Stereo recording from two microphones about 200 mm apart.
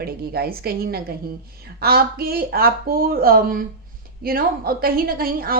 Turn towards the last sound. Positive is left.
turn(degrees=-50)  # may be behind; listen again after turning